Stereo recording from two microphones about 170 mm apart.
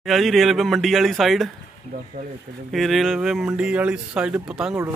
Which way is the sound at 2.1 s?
40° right (ahead or behind).